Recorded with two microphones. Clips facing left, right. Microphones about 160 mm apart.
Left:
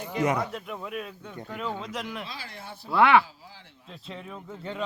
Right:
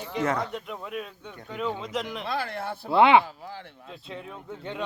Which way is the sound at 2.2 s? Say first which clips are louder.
Right 11 dB; 60° right (ahead or behind).